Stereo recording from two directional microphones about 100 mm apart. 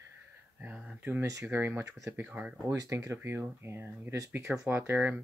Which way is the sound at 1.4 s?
25° right (ahead or behind).